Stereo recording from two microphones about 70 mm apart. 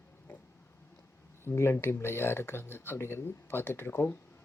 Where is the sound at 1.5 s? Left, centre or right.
Left.